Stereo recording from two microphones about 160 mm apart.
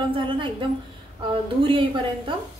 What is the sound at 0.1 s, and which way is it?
Speech, 30° right (ahead or behind).